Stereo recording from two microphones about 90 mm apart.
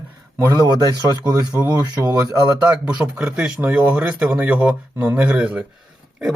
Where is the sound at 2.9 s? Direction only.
10° right (ahead or behind).